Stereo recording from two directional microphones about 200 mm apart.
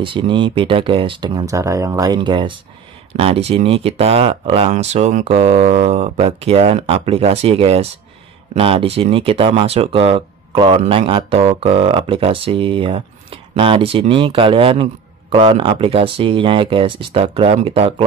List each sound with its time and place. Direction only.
0.0 s speech: 25° right (ahead or behind)